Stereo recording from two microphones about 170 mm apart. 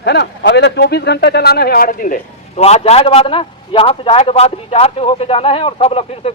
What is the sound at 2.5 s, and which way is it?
A man's voice, 40° left (ahead or behind).